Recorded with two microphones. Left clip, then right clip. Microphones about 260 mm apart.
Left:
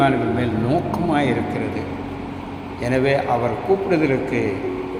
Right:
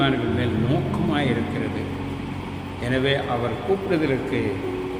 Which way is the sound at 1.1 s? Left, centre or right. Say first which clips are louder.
Left 4 dB; centre.